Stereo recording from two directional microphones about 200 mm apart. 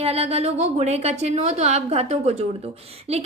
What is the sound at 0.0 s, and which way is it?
A woman's voice, 30° right (ahead or behind).